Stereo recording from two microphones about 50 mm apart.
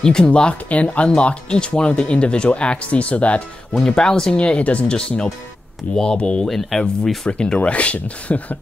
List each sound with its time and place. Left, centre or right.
0.0 s speech: centre
3.7 s speech: centre
4.4 s speech: left
6.4 s speech: centre
7.2 s speech: left